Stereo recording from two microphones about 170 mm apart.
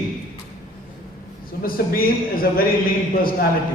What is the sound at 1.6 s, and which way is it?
A man's voice, 60° left (ahead or behind).